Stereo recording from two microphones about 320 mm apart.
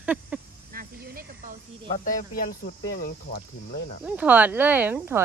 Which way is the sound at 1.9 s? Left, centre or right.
Left.